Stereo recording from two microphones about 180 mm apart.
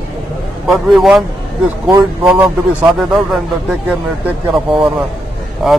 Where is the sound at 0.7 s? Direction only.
Centre (ahead or behind).